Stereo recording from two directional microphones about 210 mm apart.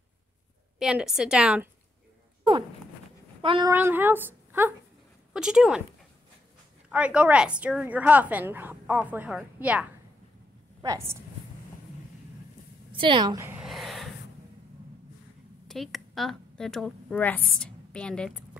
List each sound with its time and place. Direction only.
0.7 s a woman's voice: 5° right (ahead or behind)
3.4 s speech: 20° right (ahead or behind)
3.7 s a woman's voice: 10° right (ahead or behind)
6.9 s a woman's voice: 5° right (ahead or behind)
10.8 s a woman's voice: 15° right (ahead or behind)
12.9 s a woman's voice: 25° right (ahead or behind)
13.7 s a sound: centre (ahead or behind)
15.7 s a woman's voice: centre (ahead or behind)